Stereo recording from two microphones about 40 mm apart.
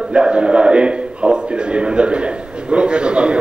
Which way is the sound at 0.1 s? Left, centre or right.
Right.